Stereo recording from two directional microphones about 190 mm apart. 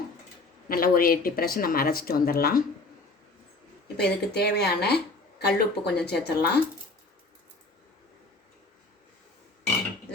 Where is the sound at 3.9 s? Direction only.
60° left (ahead or behind).